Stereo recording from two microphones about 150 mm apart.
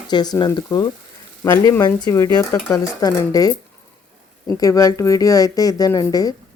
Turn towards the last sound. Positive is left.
turn(degrees=25)  # may be behind; listen again after turning